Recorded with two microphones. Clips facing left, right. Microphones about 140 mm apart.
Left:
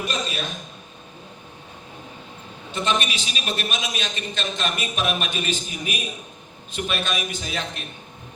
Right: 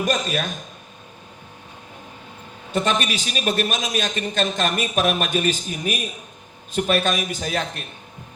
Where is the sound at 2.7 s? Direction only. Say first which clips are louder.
Right 3 dB; 45° right (ahead or behind).